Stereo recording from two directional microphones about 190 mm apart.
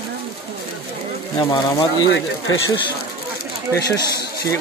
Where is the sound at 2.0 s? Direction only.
90° left.